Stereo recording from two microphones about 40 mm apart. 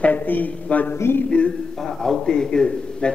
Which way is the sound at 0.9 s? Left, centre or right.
Left.